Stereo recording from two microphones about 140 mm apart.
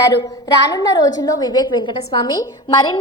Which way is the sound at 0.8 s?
25° left (ahead or behind).